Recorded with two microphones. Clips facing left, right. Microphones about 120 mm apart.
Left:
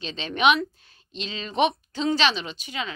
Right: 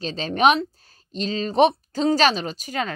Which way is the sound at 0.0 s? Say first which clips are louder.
Right 3 dB; 40° right (ahead or behind).